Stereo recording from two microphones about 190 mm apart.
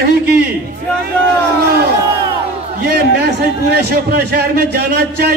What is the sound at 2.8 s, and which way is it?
A man's voice, 60° right (ahead or behind).